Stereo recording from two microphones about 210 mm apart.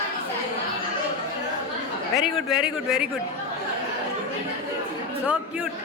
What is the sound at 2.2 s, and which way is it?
Speech, 5° right (ahead or behind).